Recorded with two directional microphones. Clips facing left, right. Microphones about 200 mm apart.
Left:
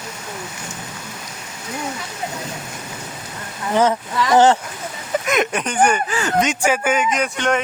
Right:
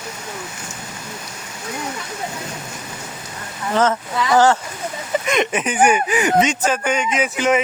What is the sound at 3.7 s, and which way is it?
Speech, 15° left (ahead or behind).